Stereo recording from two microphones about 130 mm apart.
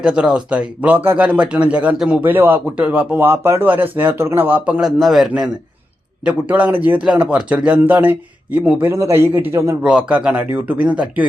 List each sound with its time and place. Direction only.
0.0 s speech: 5° right (ahead or behind)
4.8 s a man's voice: centre (ahead or behind); by 9.7 s 20° right (ahead or behind)
9.8 s speech: 10° right (ahead or behind)